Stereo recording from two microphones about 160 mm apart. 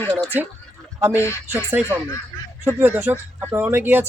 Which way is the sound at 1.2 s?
15° left (ahead or behind).